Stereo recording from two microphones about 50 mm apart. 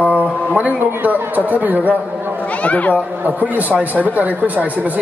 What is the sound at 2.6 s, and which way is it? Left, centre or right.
Speech, left.